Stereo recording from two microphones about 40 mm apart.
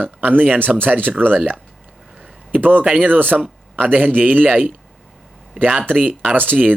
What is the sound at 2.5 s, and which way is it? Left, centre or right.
Speech, right.